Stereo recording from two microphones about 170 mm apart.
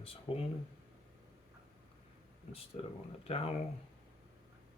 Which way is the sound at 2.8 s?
40° left (ahead or behind).